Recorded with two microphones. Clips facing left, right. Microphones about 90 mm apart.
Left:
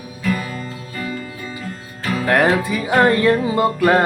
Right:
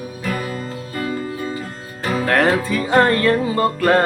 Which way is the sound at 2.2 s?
15° left (ahead or behind).